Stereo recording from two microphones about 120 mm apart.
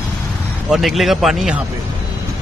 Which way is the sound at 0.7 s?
Centre (ahead or behind).